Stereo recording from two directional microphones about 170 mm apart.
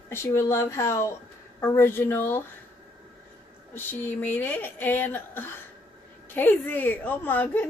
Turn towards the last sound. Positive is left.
turn(degrees=10)  # may be behind; listen again after turning